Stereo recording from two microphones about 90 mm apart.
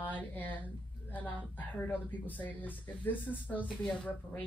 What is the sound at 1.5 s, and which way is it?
Speech, 20° left (ahead or behind).